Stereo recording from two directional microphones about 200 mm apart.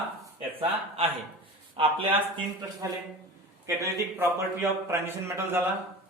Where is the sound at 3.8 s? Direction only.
15° right (ahead or behind).